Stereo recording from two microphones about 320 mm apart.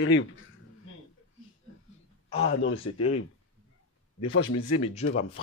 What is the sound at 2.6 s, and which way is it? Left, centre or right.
Speech, left.